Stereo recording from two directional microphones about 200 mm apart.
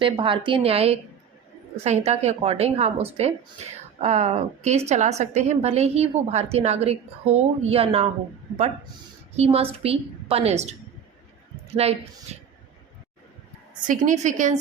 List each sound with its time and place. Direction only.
0.0 s a woman's voice: 25° right (ahead or behind)
9.3 s a woman's voice: 30° right (ahead or behind)
11.8 s a woman's voice: 30° right (ahead or behind)
13.8 s a woman's voice: 40° right (ahead or behind)